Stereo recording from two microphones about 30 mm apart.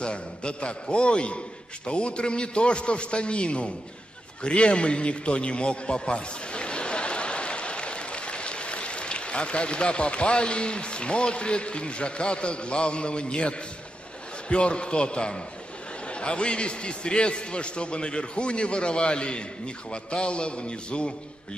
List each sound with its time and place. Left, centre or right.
0.0 s a man's voice: left